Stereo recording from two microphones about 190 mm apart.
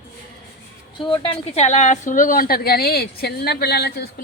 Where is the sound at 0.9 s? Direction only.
25° left (ahead or behind).